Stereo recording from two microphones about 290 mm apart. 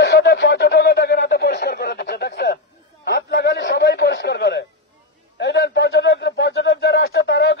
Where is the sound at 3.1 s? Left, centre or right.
Left.